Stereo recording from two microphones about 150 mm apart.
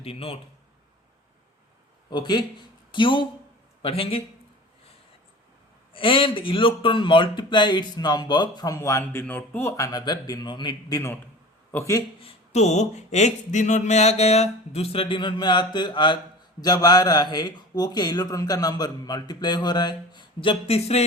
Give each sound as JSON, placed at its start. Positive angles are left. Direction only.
{"t": 0.0, "sound": "a man's voice", "side_deg": 40}
{"t": 2.0, "sound": "a man's voice", "side_deg": 30}
{"t": 5.9, "sound": "speech", "side_deg": 35}
{"t": 12.2, "sound": "a sound", "side_deg": 50}
{"t": 16.6, "sound": "speech", "side_deg": 25}